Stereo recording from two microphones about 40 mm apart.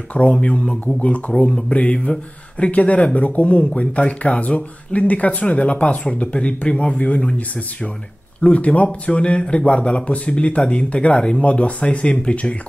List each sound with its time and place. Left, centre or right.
0.1 s speech: left